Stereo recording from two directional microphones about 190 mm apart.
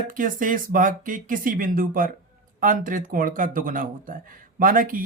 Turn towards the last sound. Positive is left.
turn(degrees=-45)  # may be behind; listen again after turning